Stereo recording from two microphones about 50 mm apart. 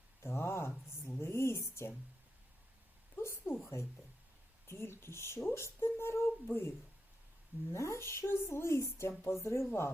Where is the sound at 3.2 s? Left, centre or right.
Left.